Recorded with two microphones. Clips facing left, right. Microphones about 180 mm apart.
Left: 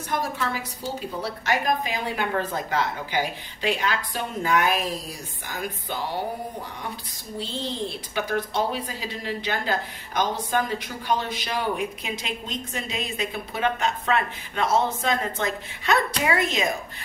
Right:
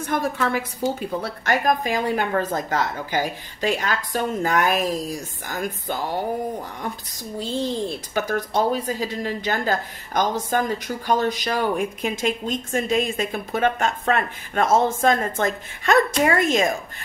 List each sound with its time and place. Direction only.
0.1 s speech: 55° right (ahead or behind)
7.3 s speech: 45° right (ahead or behind)